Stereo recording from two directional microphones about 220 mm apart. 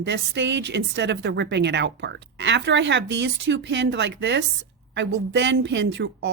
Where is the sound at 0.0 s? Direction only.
55° right (ahead or behind).